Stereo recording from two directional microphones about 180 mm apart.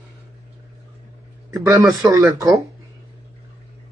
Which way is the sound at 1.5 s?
20° right (ahead or behind).